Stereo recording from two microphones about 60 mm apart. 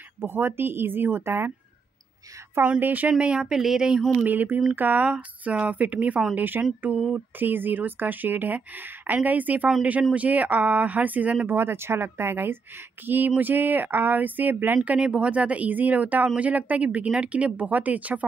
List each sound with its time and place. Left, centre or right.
0.2 s speech: right
2.8 s speech: right
3.1 s speech: centre
4.2 s speech: right
11.4 s speech: right
14.9 s speech: centre